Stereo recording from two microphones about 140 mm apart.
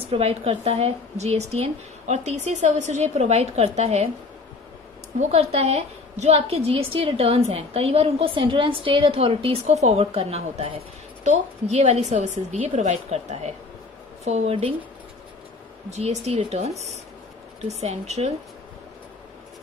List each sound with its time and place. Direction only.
0.1 s a woman's voice: 45° right (ahead or behind)
5.3 s a woman's voice: 50° right (ahead or behind)
11.2 s a woman's voice: 50° right (ahead or behind)
15.9 s a woman's voice: 50° right (ahead or behind)